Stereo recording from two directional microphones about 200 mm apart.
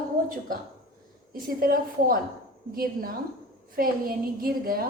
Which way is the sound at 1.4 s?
45° right (ahead or behind).